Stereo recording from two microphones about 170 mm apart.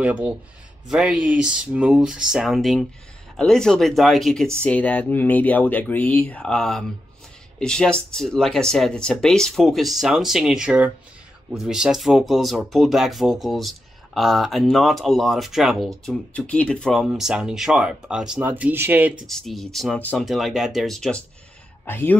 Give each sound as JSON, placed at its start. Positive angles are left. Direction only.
{"t": 0.0, "sound": "speech", "side_deg": -5}
{"t": 19.2, "sound": "speech", "side_deg": 0}